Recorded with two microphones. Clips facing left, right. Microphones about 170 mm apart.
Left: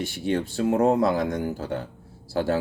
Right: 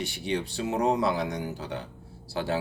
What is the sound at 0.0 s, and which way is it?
A man's voice, 50° left (ahead or behind).